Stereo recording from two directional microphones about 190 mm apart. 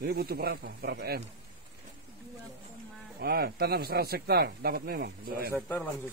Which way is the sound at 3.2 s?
55° right (ahead or behind).